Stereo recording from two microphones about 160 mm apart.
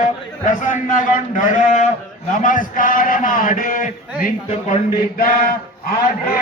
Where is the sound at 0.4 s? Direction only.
55° left (ahead or behind).